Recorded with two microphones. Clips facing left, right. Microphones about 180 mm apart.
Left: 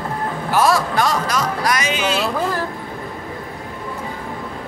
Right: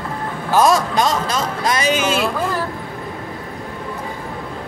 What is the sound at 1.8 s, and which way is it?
Speech, 45° right (ahead or behind).